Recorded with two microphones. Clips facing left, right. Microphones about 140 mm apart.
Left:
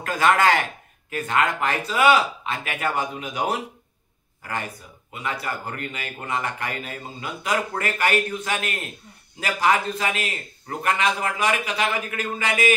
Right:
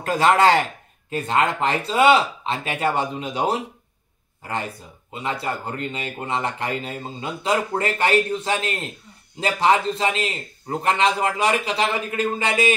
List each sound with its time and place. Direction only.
0.0 s speech: 30° right (ahead or behind)